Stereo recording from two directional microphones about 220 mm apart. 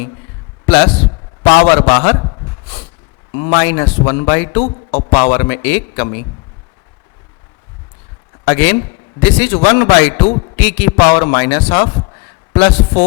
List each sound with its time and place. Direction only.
0.6 s a sound: 10° left (ahead or behind)
1.6 s a man's voice: 10° left (ahead or behind)
2.2 s a sound: 25° left (ahead or behind)
3.3 s a man's voice: 15° left (ahead or behind)
4.6 s a man's voice: 35° left (ahead or behind)
5.0 s a man's voice: 10° left (ahead or behind)
8.4 s a man's voice: 10° left (ahead or behind)